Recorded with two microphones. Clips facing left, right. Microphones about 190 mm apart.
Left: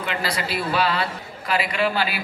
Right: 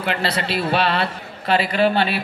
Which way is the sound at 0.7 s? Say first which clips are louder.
Right 2 dB; 65° right (ahead or behind).